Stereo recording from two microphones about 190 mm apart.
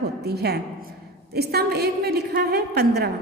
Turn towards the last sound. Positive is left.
turn(degrees=-55)  # may be behind; listen again after turning